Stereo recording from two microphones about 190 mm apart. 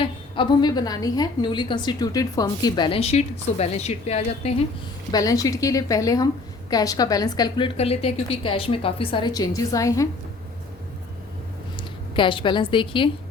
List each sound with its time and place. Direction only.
0.0 s a woman's voice: 25° left (ahead or behind)
5.1 s a woman's voice: 20° left (ahead or behind)
7.8 s a woman's voice: 30° left (ahead or behind); by 10.1 s 15° left (ahead or behind)
11.8 s a woman's voice: 25° left (ahead or behind)